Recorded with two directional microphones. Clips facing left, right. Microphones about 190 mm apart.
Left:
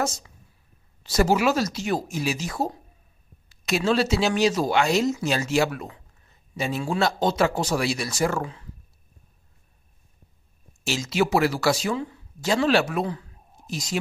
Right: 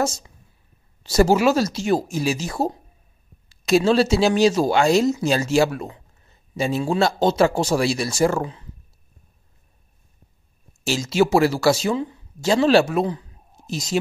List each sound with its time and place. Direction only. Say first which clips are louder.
0.0 s speech: right 4 dB; 25° right (ahead or behind)
10.9 s speech: right 4 dB; 30° right (ahead or behind)